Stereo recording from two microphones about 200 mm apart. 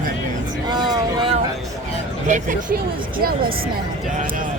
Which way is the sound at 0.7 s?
20° right (ahead or behind).